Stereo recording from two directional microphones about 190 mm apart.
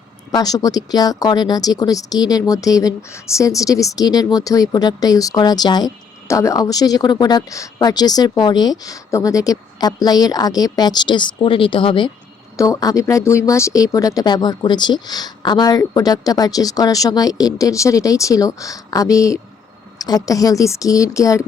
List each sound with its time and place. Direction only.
0.3 s a woman's voice: 20° left (ahead or behind)